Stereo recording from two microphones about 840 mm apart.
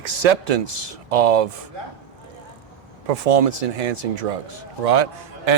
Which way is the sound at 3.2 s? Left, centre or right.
Right.